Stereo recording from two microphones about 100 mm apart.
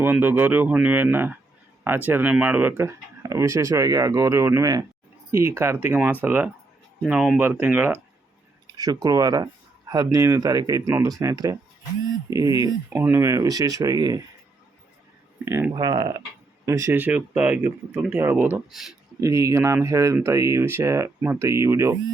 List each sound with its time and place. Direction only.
0.0 s speech: 20° right (ahead or behind)
7.0 s speech: 10° right (ahead or behind)
7.3 s speech: 20° right (ahead or behind)
8.7 s speech: 40° right (ahead or behind)
12.9 s speech: 25° right (ahead or behind)
15.7 s speech: 40° right (ahead or behind)
17.0 s speech: 15° right (ahead or behind)
18.7 s speech: 5° right (ahead or behind)
19.2 s speech: 30° right (ahead or behind)